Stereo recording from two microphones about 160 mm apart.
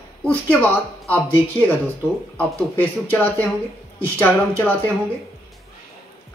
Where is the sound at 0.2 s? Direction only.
10° left (ahead or behind).